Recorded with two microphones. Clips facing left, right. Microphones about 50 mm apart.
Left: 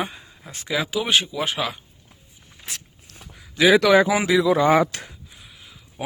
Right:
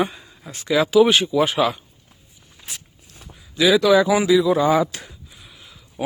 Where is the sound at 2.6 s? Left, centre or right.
Left.